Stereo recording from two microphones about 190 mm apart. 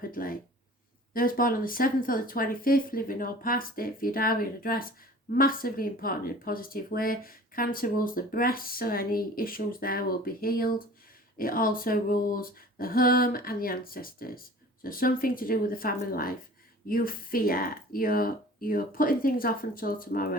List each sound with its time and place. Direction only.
0.1 s speech: 50° left (ahead or behind)